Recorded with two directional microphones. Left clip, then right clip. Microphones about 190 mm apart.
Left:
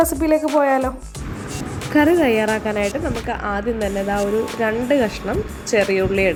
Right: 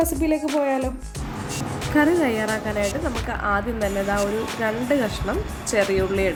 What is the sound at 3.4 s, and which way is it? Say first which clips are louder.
Music: right 1 dB; 10° left (ahead or behind).